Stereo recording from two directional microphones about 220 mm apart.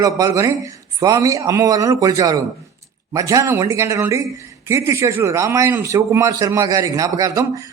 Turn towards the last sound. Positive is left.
turn(degrees=-15)  # may be behind; listen again after turning